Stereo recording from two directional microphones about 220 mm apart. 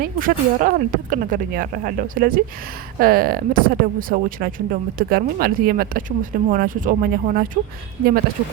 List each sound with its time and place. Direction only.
0.0 s speech: 40° right (ahead or behind)